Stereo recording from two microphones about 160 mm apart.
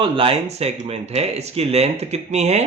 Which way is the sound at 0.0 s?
35° right (ahead or behind).